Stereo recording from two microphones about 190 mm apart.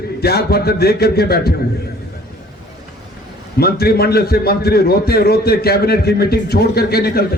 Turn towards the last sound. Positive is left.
turn(degrees=55)  # may be behind; listen again after turning